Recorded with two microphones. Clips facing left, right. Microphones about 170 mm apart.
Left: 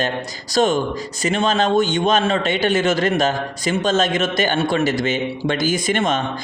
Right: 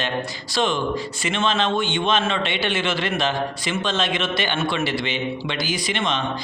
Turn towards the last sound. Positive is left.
turn(degrees=45)  # may be behind; listen again after turning